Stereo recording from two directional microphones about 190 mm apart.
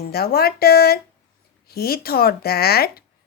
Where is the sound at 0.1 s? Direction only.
55° left (ahead or behind).